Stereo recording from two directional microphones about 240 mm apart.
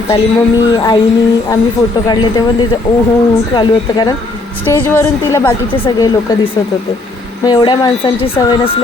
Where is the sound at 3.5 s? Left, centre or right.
Centre.